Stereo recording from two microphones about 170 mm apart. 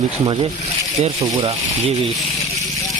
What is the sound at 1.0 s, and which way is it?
Speech, 35° right (ahead or behind).